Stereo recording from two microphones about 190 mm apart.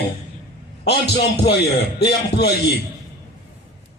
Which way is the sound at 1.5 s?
60° left (ahead or behind).